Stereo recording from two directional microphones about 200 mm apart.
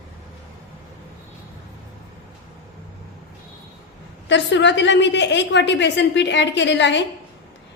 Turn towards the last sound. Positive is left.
turn(degrees=65)  # may be behind; listen again after turning